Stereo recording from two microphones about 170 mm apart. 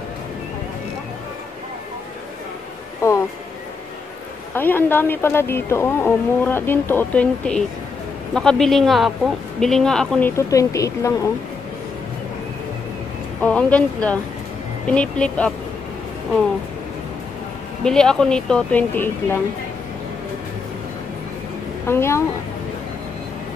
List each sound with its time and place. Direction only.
4.6 s speech: 10° left (ahead or behind)
10.3 s speech: 20° left (ahead or behind)
13.4 s speech: 10° left (ahead or behind)
17.8 s speech: 5° left (ahead or behind)
21.8 s speech: 15° left (ahead or behind)